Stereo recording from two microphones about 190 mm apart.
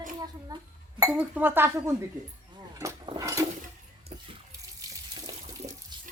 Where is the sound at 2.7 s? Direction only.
20° right (ahead or behind).